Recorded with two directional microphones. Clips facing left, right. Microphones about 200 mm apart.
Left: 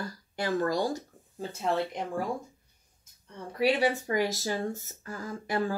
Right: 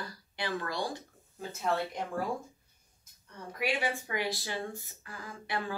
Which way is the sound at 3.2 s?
35° left (ahead or behind).